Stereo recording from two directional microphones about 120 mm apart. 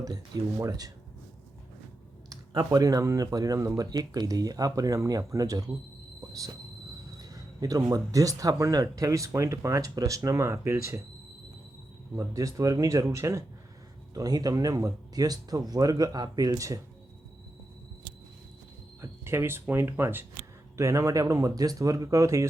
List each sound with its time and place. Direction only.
0.6 s speech: 30° right (ahead or behind)
2.3 s speech: 30° right (ahead or behind)
7.2 s speech: 30° right (ahead or behind)
12.1 s speech: 25° right (ahead or behind)
19.0 s speech: 20° right (ahead or behind)